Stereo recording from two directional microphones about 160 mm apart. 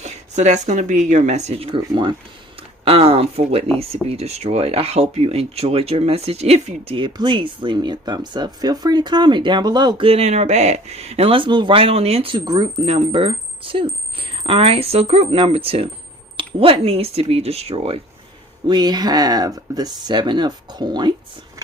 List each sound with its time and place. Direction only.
0.0 s speech: 45° right (ahead or behind); by 12.8 s 25° right (ahead or behind)
12.8 s speech: 40° right (ahead or behind)
18.7 s speech: 25° right (ahead or behind)